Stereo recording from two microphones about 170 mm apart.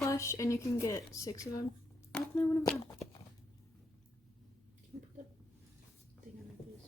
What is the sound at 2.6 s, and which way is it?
Speech, 5° left (ahead or behind).